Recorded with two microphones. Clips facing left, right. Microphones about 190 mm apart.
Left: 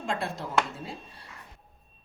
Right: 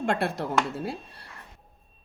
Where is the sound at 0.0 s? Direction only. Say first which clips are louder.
Right 5 dB; 65° right (ahead or behind).